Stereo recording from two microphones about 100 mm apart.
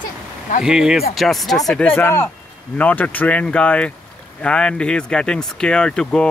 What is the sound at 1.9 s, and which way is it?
Speech, 20° left (ahead or behind).